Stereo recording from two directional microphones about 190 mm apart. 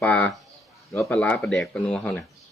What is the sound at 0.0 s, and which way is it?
Speech, 10° left (ahead or behind).